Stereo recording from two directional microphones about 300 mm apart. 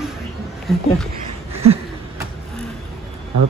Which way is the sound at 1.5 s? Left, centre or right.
Centre.